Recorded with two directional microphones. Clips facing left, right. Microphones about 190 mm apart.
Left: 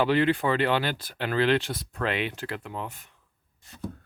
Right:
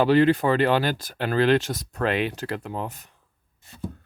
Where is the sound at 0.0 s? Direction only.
40° right (ahead or behind).